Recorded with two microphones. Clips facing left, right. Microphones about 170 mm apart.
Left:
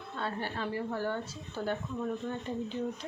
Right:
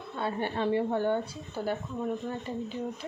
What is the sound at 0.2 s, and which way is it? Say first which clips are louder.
A woman's voice: right 5 dB; 15° right (ahead or behind).